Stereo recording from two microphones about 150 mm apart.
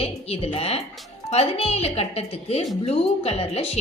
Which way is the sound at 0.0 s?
40° left (ahead or behind).